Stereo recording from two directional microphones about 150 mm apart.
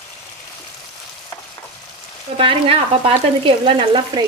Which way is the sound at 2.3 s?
40° right (ahead or behind).